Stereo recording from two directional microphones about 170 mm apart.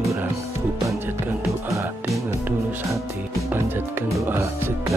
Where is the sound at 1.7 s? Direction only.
20° right (ahead or behind).